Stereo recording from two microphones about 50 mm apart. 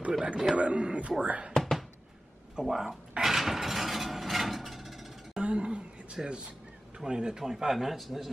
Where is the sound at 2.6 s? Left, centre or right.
Centre.